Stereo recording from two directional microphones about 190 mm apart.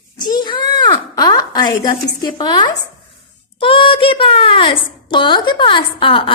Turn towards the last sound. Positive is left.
turn(degrees=25)  # may be behind; listen again after turning